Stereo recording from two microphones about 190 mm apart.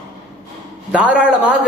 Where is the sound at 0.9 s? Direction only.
5° right (ahead or behind).